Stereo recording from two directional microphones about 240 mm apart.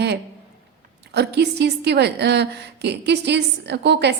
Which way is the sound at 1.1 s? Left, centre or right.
Right.